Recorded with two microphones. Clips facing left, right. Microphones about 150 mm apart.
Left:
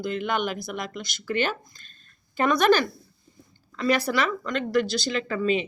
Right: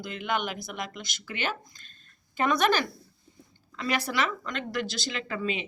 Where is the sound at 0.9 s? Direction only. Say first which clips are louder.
Left 9 dB; 40° left (ahead or behind).